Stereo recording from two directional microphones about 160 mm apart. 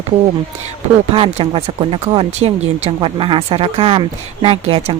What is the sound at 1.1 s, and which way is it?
Speech, 35° right (ahead or behind).